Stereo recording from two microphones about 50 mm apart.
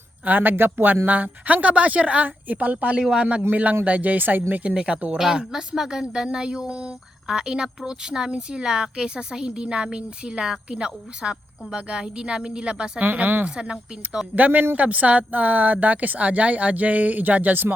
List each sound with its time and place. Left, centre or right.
0.3 s speech: right
1.0 s speech: right
4.6 s speech: right
5.1 s speech: centre
13.0 s speech: right
13.4 s speech: centre
14.3 s speech: right